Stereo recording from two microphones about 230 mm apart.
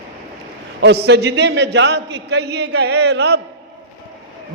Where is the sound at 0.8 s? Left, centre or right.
Right.